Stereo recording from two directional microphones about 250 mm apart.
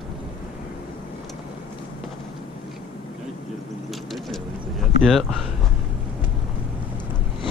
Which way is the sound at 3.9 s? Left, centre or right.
Centre.